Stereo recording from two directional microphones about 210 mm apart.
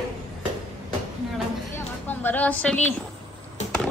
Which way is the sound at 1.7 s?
10° left (ahead or behind).